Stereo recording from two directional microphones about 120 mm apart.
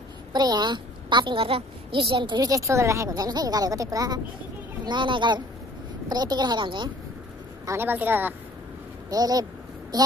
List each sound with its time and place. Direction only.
0.3 s a woman's voice: 35° right (ahead or behind)
4.8 s a woman's voice: 40° right (ahead or behind)
7.6 s a woman's voice: 20° right (ahead or behind)
9.1 s a sound: 30° right (ahead or behind)